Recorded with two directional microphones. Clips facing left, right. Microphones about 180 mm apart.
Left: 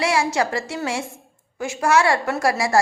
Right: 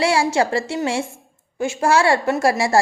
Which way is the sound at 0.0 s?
30° right (ahead or behind).